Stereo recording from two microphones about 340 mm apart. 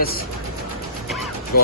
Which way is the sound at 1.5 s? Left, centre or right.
Left.